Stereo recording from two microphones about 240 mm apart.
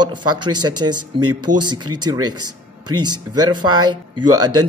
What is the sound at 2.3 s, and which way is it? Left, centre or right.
Speech, right.